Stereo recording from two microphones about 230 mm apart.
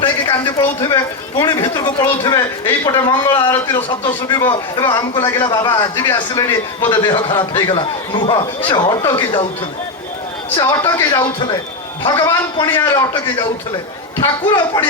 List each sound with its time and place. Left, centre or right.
0.8 s a man's voice: centre
10.5 s a man's voice: centre
14.2 s a man's voice: centre